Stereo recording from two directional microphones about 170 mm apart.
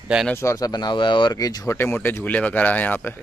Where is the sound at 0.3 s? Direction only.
15° left (ahead or behind).